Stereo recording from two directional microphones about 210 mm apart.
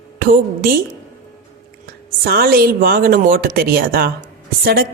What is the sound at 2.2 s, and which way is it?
Speech, 45° right (ahead or behind).